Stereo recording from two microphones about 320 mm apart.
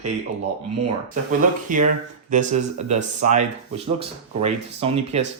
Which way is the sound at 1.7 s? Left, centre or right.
Right.